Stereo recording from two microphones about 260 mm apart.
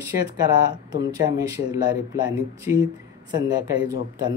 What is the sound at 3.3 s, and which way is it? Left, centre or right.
Speech, centre.